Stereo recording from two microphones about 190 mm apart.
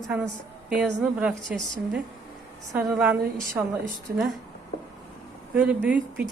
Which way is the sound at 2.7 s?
15° right (ahead or behind).